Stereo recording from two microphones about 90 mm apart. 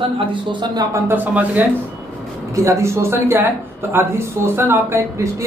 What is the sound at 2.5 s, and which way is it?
A man's voice, 35° right (ahead or behind).